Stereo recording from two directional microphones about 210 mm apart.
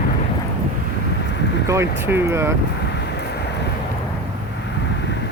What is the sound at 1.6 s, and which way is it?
Speech, 15° right (ahead or behind).